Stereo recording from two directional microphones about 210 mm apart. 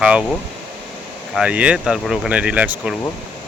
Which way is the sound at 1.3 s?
5° right (ahead or behind).